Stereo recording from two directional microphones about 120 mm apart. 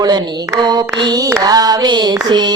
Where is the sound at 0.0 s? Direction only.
35° right (ahead or behind).